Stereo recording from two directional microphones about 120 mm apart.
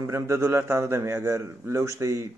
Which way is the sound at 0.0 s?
20° right (ahead or behind).